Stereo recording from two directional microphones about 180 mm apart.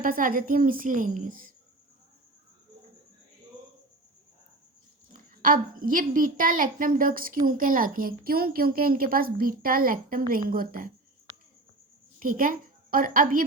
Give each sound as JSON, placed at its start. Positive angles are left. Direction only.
{"t": 0.0, "sound": "a woman's voice", "side_deg": -50}
{"t": 5.1, "sound": "a woman's voice", "side_deg": -50}
{"t": 12.2, "sound": "a woman's voice", "side_deg": -50}